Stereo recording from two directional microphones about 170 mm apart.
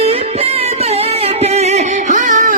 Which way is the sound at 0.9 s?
35° right (ahead or behind).